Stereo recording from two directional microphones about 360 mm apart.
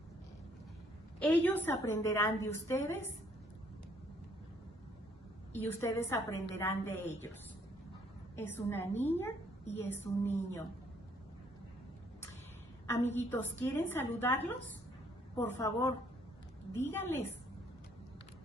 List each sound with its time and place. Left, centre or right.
1.2 s a woman's voice: centre
5.6 s a woman's voice: centre
8.4 s a woman's voice: centre
13.1 s a woman's voice: centre